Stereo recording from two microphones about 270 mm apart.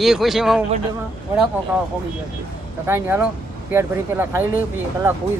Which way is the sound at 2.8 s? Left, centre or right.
Centre.